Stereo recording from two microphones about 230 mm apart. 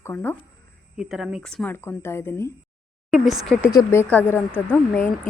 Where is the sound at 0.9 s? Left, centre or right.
Centre.